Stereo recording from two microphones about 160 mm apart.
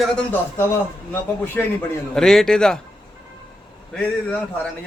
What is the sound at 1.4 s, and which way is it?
A man's voice, 10° left (ahead or behind).